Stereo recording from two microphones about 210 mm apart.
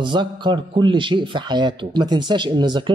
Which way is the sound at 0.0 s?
20° right (ahead or behind).